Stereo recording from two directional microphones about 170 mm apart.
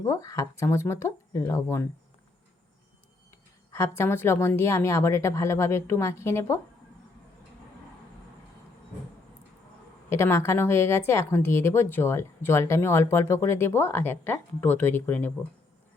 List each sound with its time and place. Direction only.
0.0 s speech: 20° left (ahead or behind)
3.7 s speech: 15° left (ahead or behind)
10.1 s speech: 15° left (ahead or behind)